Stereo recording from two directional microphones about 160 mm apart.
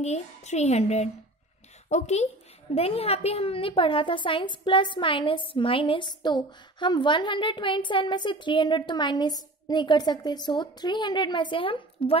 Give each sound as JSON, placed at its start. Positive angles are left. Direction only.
{"t": 0.0, "sound": "a child's voice", "side_deg": 45}